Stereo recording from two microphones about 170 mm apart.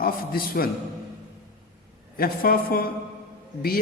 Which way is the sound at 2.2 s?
60° left (ahead or behind).